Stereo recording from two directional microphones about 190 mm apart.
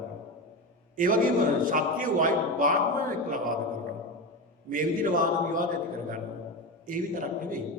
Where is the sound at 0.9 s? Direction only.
45° right (ahead or behind).